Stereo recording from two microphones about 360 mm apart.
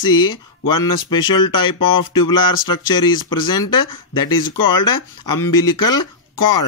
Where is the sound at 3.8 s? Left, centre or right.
Left.